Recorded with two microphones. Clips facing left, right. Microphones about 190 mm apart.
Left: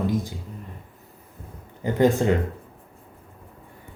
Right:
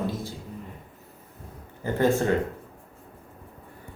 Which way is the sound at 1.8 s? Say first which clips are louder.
Left 3 dB; 15° left (ahead or behind).